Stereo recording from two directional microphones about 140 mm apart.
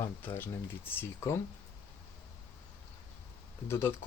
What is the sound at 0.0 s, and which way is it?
Speech, 15° left (ahead or behind).